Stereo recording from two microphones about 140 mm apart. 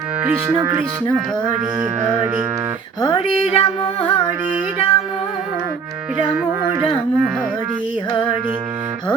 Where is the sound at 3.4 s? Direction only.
45° left (ahead or behind).